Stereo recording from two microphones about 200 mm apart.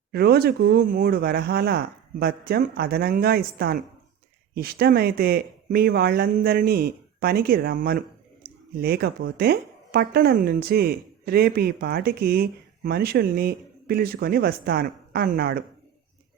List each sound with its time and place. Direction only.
0.1 s speech: 50° right (ahead or behind)
8.4 s a sound: 50° right (ahead or behind)
8.8 s speech: 50° right (ahead or behind)